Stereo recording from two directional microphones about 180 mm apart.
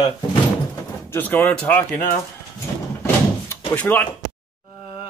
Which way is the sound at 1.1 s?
5° left (ahead or behind).